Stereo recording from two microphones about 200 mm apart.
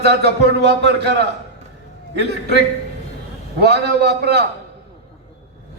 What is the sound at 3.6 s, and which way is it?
Speech, 55° right (ahead or behind).